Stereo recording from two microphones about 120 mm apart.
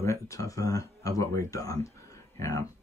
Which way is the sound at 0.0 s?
25° left (ahead or behind).